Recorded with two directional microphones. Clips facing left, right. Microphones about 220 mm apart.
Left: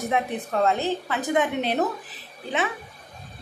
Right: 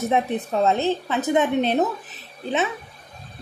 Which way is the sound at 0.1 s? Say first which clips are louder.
Right 2 dB; 25° right (ahead or behind).